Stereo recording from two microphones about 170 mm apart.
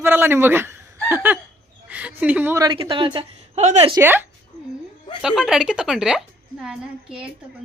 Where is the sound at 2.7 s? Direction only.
30° right (ahead or behind).